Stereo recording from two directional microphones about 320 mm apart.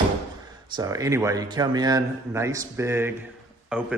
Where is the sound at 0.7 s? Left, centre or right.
Centre.